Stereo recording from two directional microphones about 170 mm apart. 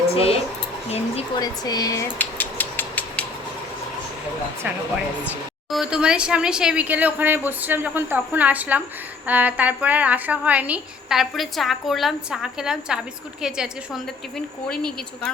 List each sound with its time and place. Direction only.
0.1 s speech: 35° left (ahead or behind)
1.4 s a sound: 25° left (ahead or behind)
4.6 s a woman's voice: 5° right (ahead or behind)